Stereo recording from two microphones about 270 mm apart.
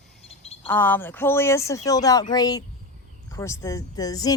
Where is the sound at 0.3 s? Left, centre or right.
Left.